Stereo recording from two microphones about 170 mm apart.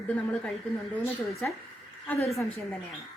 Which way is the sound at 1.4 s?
10° left (ahead or behind).